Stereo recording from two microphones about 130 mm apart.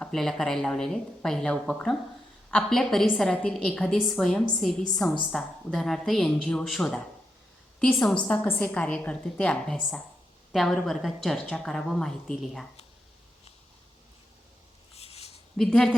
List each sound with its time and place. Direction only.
0.0 s a woman's voice: 5° left (ahead or behind)
8.0 s a woman's voice: 10° left (ahead or behind)
14.9 s a sound: 50° left (ahead or behind)
15.5 s a woman's voice: 5° left (ahead or behind)